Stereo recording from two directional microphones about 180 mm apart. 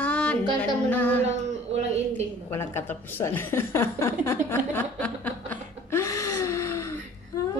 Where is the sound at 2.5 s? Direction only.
15° left (ahead or behind).